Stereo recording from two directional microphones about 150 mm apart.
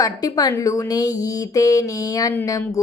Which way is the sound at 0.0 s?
25° left (ahead or behind).